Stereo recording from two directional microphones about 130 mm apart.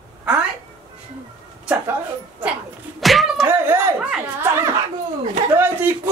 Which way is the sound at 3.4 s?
15° right (ahead or behind).